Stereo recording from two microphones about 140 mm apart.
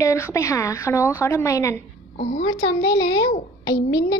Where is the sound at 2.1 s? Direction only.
65° left (ahead or behind).